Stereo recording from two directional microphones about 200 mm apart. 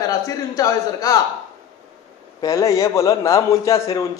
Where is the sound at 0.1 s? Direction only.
20° left (ahead or behind).